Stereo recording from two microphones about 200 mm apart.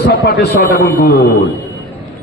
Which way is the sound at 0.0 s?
55° left (ahead or behind).